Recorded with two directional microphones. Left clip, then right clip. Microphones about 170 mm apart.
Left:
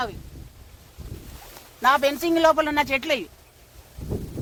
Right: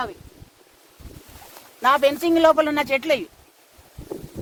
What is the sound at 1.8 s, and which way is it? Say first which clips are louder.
Speech: right 2 dB; 60° right (ahead or behind).